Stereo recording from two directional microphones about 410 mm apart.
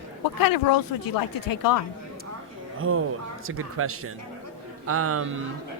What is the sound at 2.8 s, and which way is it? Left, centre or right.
Speech, right.